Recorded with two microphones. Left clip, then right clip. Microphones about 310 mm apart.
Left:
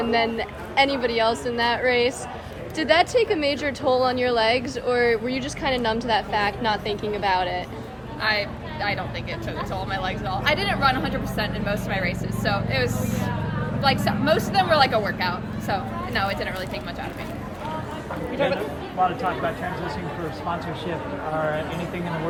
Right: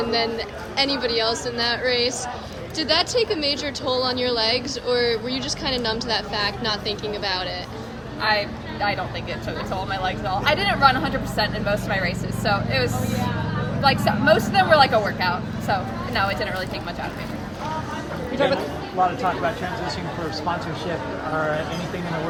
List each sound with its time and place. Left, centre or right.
0.1 s speech: left
8.2 s speech: centre
18.3 s speech: right